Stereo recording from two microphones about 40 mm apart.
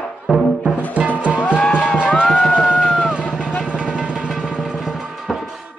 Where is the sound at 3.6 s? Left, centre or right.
Right.